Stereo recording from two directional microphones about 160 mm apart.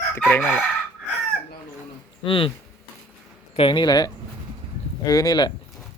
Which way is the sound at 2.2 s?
35° left (ahead or behind).